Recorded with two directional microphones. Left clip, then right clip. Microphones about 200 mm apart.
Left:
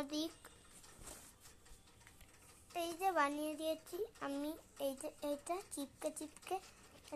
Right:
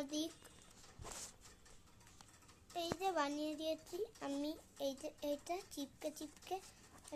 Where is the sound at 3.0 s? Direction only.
5° right (ahead or behind).